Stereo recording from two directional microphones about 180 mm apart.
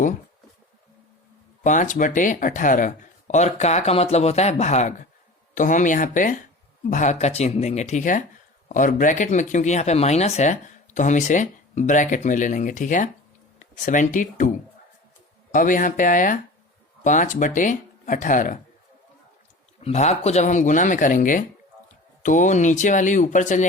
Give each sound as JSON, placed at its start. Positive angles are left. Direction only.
{"t": 1.6, "sound": "speech", "side_deg": 45}
{"t": 15.5, "sound": "speech", "side_deg": 45}
{"t": 19.8, "sound": "speech", "side_deg": 35}